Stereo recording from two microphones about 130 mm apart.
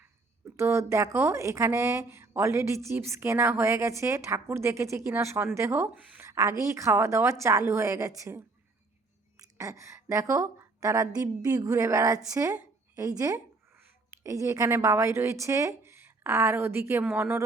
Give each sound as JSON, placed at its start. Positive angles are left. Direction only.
{"t": 0.5, "sound": "a woman's voice", "side_deg": -20}
{"t": 6.2, "sound": "a woman's voice", "side_deg": -25}
{"t": 9.4, "sound": "a woman's voice", "side_deg": -25}